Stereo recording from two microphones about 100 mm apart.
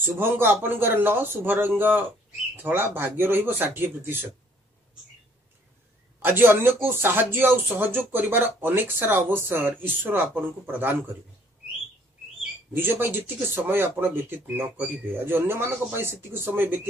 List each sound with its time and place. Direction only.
0.0 s speech: 20° right (ahead or behind)
6.1 s speech: 20° right (ahead or behind)
12.7 s speech: 20° right (ahead or behind)